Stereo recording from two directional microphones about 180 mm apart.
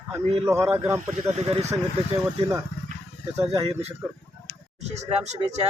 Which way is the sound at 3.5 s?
35° right (ahead or behind).